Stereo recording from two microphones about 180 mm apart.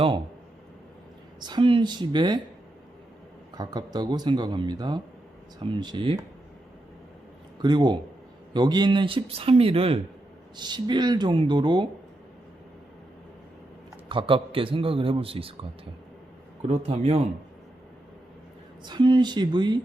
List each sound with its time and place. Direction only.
1.4 s speech: 25° right (ahead or behind)
3.5 s speech: 20° right (ahead or behind)
7.6 s speech: 25° right (ahead or behind)
14.1 s speech: 30° right (ahead or behind)
16.6 s speech: 30° right (ahead or behind)
18.9 s speech: 25° right (ahead or behind)